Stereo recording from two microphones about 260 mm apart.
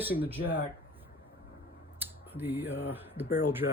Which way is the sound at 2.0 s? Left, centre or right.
Centre.